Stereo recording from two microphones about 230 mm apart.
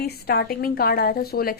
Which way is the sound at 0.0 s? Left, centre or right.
Left.